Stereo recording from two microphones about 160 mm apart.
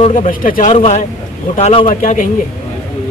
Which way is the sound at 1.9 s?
55° left (ahead or behind).